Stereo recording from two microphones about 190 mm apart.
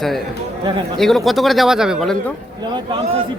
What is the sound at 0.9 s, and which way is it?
Speech, centre (ahead or behind).